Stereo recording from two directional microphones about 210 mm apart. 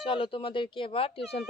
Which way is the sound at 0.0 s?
25° left (ahead or behind).